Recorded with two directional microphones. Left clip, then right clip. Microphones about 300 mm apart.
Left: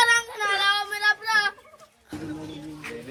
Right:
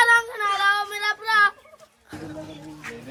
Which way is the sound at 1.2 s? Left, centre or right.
Centre.